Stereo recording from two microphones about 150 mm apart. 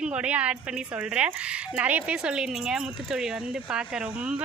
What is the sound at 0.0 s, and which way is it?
Speech, 10° right (ahead or behind).